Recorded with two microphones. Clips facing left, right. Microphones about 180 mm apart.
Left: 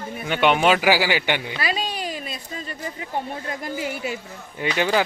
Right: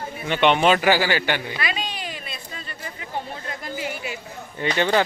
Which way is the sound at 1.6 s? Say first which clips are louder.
Left 3 dB; 35° left (ahead or behind).